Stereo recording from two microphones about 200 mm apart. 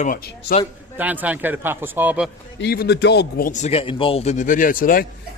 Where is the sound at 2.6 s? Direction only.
55° left (ahead or behind).